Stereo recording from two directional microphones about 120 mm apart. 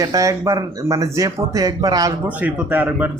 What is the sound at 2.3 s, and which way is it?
Speech, 15° right (ahead or behind).